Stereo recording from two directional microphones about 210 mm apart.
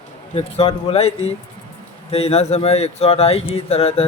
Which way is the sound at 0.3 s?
30° left (ahead or behind).